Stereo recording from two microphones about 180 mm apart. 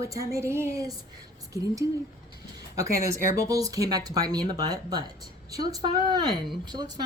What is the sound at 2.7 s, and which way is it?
A woman's voice, 20° right (ahead or behind).